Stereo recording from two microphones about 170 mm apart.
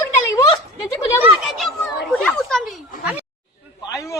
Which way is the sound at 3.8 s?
20° left (ahead or behind).